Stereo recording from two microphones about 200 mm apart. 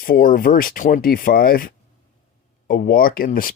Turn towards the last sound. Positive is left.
turn(degrees=45)  # may be behind; listen again after turning